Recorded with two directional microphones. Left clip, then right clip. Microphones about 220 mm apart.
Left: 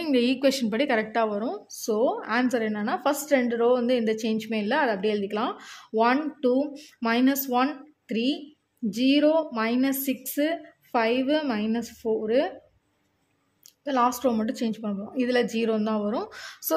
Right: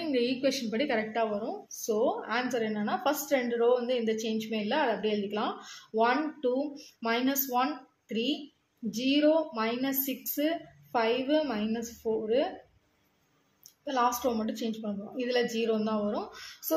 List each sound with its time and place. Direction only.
0.0 s a woman's voice: 55° left (ahead or behind)
13.8 s a woman's voice: 50° left (ahead or behind)